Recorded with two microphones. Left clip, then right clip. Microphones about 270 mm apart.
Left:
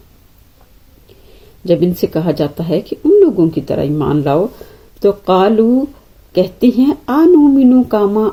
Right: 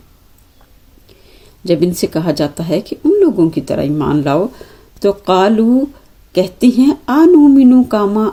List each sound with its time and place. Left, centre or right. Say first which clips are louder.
1.6 s speech: left 1 dB; right